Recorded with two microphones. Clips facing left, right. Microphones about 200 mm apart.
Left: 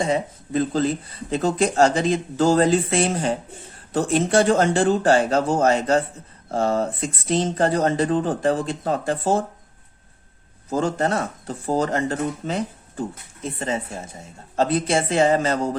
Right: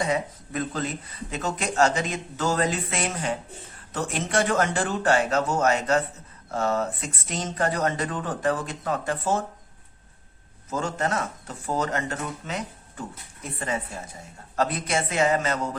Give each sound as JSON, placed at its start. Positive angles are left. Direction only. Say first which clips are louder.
{"t": 0.0, "sound": "speech", "louder": "left 4 dB", "side_deg": 30}
{"t": 10.7, "sound": "speech", "louder": "left 6 dB", "side_deg": 35}